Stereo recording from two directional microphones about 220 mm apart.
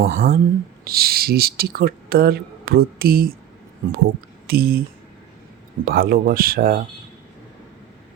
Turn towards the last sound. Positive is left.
turn(degrees=-40)  # may be behind; listen again after turning